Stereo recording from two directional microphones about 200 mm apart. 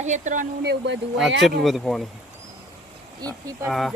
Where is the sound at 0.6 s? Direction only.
55° right (ahead or behind).